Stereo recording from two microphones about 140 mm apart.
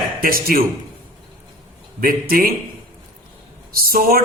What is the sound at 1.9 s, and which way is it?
Speech, 90° right.